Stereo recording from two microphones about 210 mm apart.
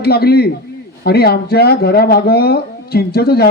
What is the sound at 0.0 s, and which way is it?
Speech, 50° left (ahead or behind).